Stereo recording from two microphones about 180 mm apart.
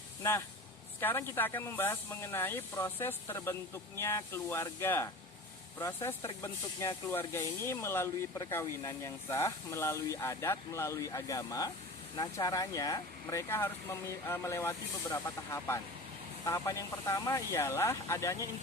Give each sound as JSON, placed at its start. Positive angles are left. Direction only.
{"t": 0.2, "sound": "speech", "side_deg": 15}